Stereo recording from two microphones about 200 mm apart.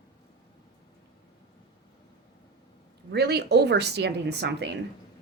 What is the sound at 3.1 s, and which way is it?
Speech, 55° right (ahead or behind).